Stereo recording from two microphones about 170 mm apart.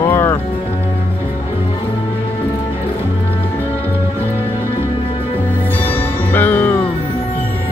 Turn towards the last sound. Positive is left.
turn(degrees=10)  # may be behind; listen again after turning